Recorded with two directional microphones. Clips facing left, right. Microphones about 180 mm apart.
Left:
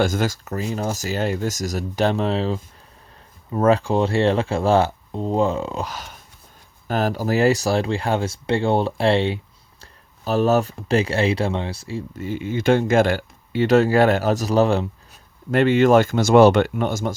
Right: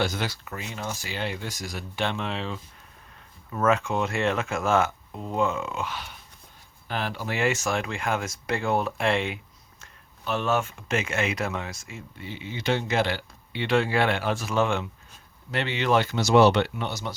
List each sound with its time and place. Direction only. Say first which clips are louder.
0.0 s speech: left 7 dB; 45° left (ahead or behind)
15.5 s speech: left 10 dB; 45° left (ahead or behind)